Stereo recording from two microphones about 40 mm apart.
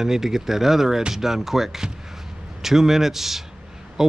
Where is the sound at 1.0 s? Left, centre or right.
Centre.